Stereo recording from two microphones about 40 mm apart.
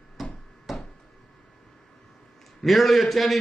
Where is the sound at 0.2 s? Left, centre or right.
Centre.